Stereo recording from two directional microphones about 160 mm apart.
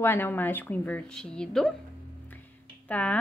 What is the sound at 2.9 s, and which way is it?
Speech, 10° left (ahead or behind).